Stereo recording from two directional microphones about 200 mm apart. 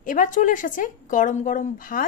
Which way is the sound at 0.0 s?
40° left (ahead or behind).